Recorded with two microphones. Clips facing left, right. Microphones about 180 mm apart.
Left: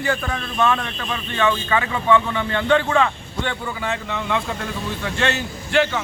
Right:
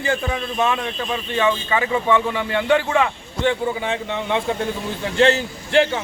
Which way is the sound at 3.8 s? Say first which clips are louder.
Right 2 dB; 20° right (ahead or behind).